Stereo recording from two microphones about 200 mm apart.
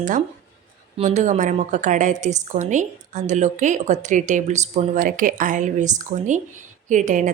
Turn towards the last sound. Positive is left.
turn(degrees=-40)  # may be behind; listen again after turning